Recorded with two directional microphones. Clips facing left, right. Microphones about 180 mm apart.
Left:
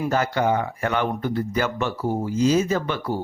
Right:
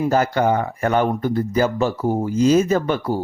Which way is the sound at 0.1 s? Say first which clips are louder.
Right 2 dB; 45° right (ahead or behind).